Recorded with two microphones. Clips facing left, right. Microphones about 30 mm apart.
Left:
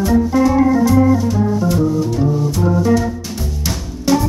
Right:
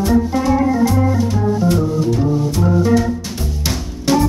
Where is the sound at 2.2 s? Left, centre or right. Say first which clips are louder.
Even; centre.